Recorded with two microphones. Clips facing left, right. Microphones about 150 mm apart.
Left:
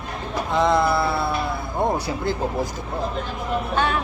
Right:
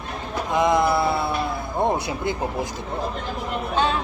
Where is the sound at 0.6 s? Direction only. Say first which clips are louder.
Even; 15° right (ahead or behind).